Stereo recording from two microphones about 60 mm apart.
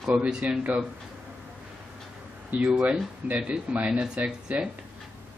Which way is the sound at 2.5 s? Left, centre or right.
Right.